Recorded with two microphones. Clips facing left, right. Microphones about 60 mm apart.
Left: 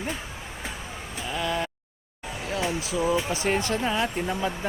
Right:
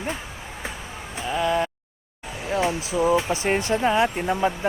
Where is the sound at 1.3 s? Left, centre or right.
Centre.